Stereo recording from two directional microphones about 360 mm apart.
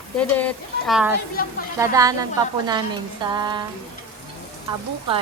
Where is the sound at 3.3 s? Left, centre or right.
Centre.